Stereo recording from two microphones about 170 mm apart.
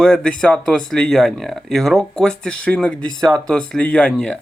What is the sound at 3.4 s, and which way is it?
Speech, 5° left (ahead or behind).